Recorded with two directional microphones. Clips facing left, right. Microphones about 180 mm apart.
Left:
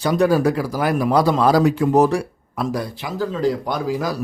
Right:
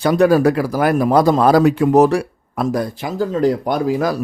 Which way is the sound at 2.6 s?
50° right (ahead or behind).